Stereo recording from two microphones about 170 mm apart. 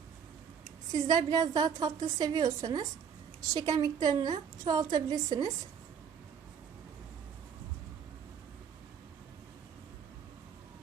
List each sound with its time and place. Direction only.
0.9 s a woman's voice: 25° right (ahead or behind)